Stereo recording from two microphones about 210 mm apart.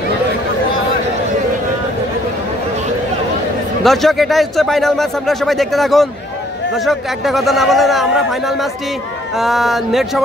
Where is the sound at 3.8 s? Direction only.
Centre (ahead or behind).